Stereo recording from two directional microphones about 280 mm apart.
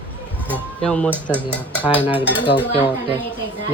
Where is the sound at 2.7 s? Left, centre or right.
Centre.